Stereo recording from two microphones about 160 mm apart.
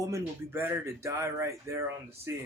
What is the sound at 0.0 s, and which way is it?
Speech, 15° right (ahead or behind).